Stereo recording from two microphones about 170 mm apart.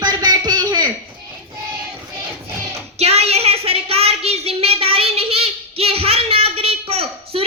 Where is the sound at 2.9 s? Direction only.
35° right (ahead or behind).